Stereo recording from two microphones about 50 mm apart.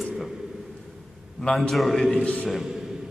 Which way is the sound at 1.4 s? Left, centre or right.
Centre.